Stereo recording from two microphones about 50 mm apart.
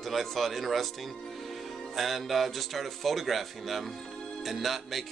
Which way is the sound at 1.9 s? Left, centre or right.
Centre.